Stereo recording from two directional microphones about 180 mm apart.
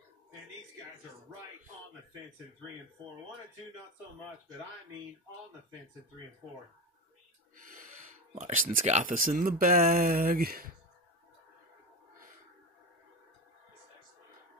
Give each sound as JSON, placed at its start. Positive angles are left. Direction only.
{"t": 7.5, "sound": "speech", "side_deg": -45}